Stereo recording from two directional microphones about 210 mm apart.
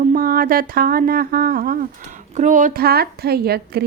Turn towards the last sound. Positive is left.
turn(degrees=-50)  # may be behind; listen again after turning